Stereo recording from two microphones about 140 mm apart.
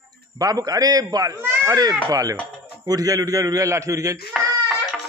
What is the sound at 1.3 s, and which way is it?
Speech, 15° right (ahead or behind).